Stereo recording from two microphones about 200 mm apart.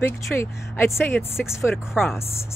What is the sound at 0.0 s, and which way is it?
Speech, 15° left (ahead or behind).